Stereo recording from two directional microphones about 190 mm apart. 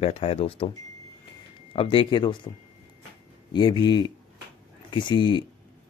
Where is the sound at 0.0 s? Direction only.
30° left (ahead or behind).